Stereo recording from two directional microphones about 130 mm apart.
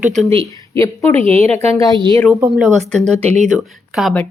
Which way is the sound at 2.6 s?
5° left (ahead or behind).